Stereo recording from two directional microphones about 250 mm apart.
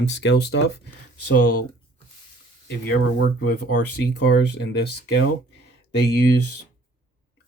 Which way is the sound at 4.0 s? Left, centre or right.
Left.